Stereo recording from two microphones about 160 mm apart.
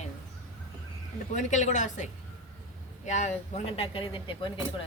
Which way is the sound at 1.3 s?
50° left (ahead or behind).